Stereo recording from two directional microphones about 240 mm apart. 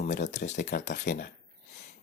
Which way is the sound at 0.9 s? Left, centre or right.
Left.